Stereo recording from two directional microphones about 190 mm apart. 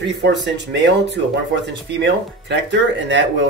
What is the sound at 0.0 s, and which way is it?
Speech, 65° right (ahead or behind).